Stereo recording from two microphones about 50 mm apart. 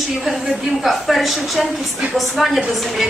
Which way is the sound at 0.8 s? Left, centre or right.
Centre.